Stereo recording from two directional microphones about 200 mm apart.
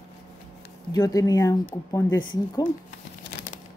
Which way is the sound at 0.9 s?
15° left (ahead or behind).